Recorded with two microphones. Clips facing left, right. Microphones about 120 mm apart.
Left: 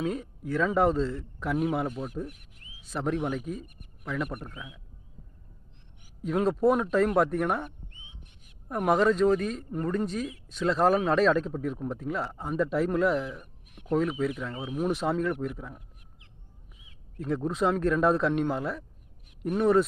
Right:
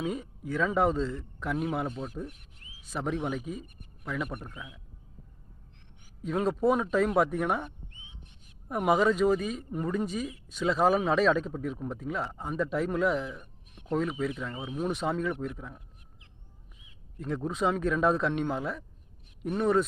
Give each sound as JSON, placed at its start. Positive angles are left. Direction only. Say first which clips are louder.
{"t": 0.0, "sound": "speech", "louder": "left 2 dB", "side_deg": 0}
{"t": 2.2, "sound": "a sound", "louder": "left 1 dB", "side_deg": -25}
{"t": 2.8, "sound": "speech", "louder": "left 2 dB", "side_deg": 0}
{"t": 6.2, "sound": "speech", "louder": "left 2 dB", "side_deg": 0}
{"t": 8.7, "sound": "speech", "louder": "left 1 dB", "side_deg": -5}
{"t": 17.2, "sound": "speech", "louder": "left 3 dB", "side_deg": 0}